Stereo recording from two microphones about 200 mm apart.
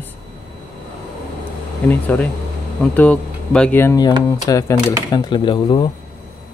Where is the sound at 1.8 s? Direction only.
10° left (ahead or behind); by 5.9 s 25° left (ahead or behind).